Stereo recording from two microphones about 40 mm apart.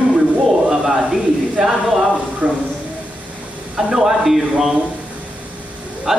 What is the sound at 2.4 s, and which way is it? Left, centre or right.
Speech, right.